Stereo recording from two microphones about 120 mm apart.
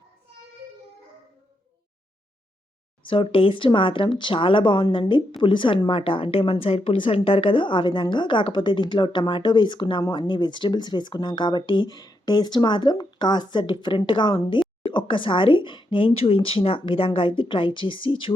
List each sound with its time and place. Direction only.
3.1 s a woman's voice: 45° left (ahead or behind)